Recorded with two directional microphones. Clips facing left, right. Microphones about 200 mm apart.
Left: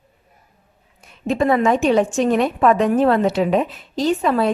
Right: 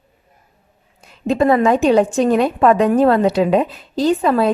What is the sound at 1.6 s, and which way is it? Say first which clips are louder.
A woman's voice: right 3 dB; 35° right (ahead or behind).